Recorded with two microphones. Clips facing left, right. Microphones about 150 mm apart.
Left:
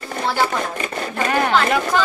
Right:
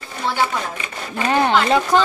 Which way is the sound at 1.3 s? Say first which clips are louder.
Right 2 dB; 25° right (ahead or behind).